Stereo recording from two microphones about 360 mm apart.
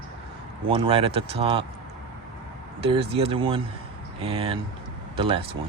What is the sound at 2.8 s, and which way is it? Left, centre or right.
Speech, centre.